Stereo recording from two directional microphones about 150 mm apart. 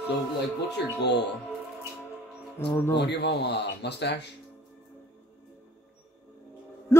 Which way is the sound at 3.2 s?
90° left.